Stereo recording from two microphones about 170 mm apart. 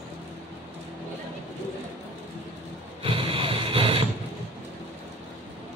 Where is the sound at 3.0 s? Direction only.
30° right (ahead or behind).